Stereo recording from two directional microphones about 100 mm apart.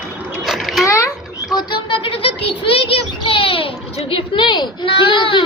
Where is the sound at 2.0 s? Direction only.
65° left (ahead or behind).